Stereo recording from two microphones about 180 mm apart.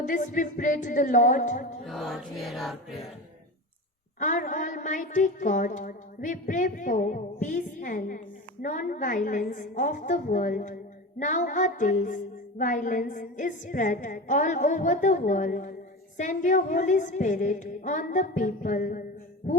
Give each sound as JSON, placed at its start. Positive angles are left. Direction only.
{"t": 0.0, "sound": "female singing", "side_deg": 45}
{"t": 1.8, "sound": "music", "side_deg": 0}
{"t": 4.2, "sound": "female singing", "side_deg": 45}